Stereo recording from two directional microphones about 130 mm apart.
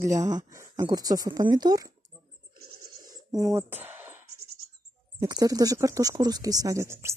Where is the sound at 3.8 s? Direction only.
15° right (ahead or behind).